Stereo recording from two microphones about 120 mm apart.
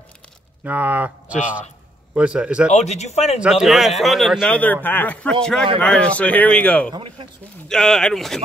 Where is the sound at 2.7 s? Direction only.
70° left (ahead or behind).